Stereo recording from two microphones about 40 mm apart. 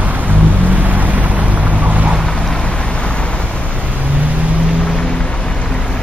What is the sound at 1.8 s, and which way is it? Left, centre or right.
Boat, right.